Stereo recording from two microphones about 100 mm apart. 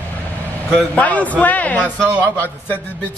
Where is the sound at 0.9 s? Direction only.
15° left (ahead or behind).